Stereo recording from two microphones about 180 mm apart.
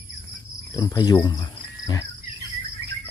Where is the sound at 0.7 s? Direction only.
25° left (ahead or behind).